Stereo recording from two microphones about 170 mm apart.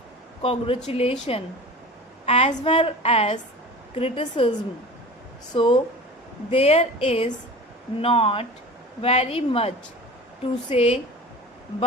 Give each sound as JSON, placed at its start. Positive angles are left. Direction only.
{"t": 0.4, "sound": "a woman's voice", "side_deg": 30}
{"t": 5.5, "sound": "speech", "side_deg": 30}